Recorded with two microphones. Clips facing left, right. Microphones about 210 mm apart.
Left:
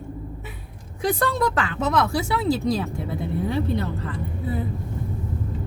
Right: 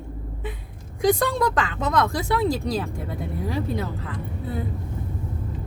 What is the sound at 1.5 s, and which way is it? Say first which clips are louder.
Speech: even; 5° left (ahead or behind).